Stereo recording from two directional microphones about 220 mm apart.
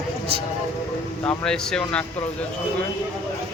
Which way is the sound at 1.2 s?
5° left (ahead or behind).